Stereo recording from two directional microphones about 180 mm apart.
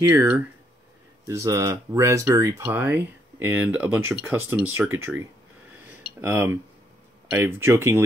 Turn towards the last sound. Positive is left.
turn(degrees=-15)  # may be behind; listen again after turning